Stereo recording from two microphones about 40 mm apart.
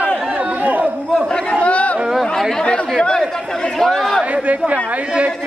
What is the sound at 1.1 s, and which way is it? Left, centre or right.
Chatter, left.